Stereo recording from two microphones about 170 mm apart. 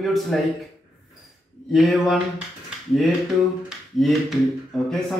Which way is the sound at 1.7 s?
Centre (ahead or behind).